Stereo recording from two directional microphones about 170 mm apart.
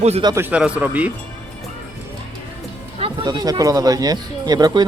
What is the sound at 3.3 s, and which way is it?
Speech, 20° right (ahead or behind).